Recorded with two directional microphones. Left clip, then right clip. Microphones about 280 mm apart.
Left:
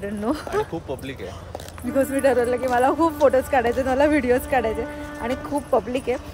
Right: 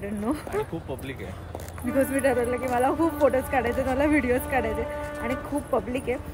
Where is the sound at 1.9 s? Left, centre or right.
Centre.